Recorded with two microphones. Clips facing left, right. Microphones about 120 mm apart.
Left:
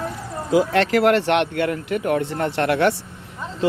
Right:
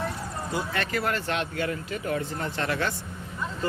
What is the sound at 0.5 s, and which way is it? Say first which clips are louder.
Speech: left 13 dB; 90° left.